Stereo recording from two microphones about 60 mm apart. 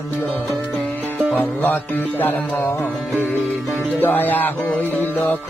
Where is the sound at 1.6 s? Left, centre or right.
Left.